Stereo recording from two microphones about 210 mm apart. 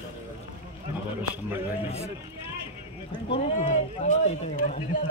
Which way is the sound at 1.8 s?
30° left (ahead or behind).